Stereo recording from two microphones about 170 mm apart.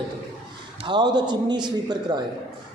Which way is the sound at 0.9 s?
25° right (ahead or behind).